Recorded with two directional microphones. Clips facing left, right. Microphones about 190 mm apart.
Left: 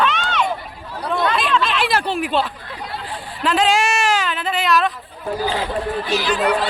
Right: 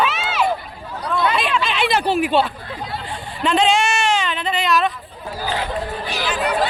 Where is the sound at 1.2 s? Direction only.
5° right (ahead or behind).